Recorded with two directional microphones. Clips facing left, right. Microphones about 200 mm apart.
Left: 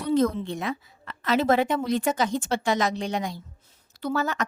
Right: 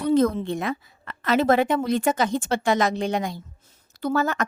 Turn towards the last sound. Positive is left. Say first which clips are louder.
# right 3 dB
turn(degrees=-50)  # may be behind; listen again after turning